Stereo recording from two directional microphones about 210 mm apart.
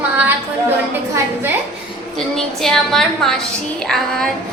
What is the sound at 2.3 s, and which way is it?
A woman's voice, centre (ahead or behind).